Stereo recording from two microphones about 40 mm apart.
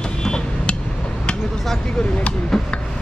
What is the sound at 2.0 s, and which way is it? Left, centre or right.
Speech, left.